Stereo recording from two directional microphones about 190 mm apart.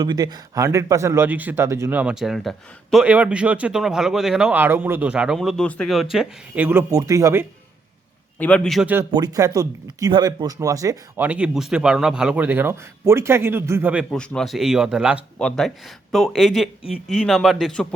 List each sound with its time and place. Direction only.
0.0 s speech: 20° right (ahead or behind)
8.4 s a man's voice: 5° left (ahead or behind)
9.1 s speech: 20° right (ahead or behind)
11.3 s speech: 5° right (ahead or behind)
14.1 s a man's voice: 5° left (ahead or behind)